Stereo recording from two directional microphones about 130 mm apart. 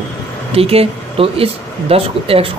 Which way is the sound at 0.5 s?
50° right (ahead or behind).